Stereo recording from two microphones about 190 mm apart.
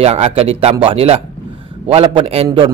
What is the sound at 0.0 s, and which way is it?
A man's voice, 30° right (ahead or behind).